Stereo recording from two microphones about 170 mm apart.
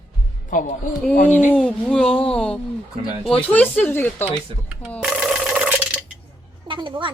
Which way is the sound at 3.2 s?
5° left (ahead or behind).